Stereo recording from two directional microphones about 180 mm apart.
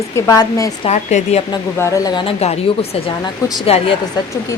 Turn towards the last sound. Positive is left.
turn(degrees=35)  # may be behind; listen again after turning